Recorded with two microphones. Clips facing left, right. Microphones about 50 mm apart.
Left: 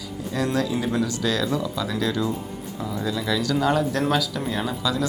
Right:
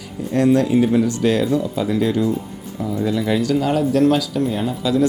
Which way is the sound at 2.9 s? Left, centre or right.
Right.